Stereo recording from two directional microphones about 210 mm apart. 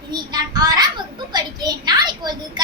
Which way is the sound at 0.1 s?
20° right (ahead or behind).